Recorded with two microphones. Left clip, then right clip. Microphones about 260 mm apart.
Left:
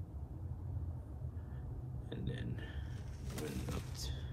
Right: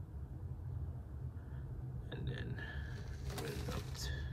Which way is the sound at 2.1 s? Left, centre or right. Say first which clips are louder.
Left 1 dB; centre.